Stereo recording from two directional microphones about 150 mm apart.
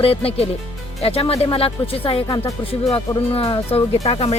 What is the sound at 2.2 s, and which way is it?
Speech, 25° left (ahead or behind).